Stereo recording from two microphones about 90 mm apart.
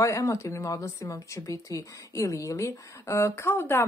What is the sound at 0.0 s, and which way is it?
Speech, 40° left (ahead or behind).